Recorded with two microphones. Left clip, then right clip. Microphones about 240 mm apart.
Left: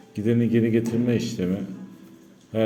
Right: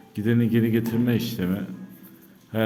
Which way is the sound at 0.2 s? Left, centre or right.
Centre.